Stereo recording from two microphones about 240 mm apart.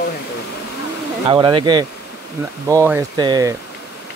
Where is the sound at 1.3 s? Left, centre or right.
Centre.